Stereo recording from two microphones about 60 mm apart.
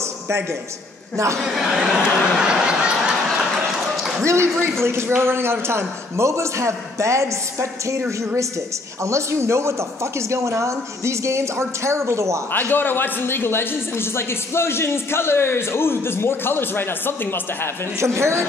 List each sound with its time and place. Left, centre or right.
0.3 s a man's voice: right
1.4 s speech: centre
4.2 s a man's voice: right
9.0 s a man's voice: right
12.5 s a man's voice: left
17.9 s a man's voice: right